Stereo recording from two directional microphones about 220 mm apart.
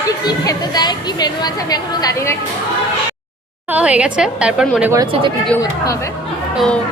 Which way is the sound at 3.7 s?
5° right (ahead or behind).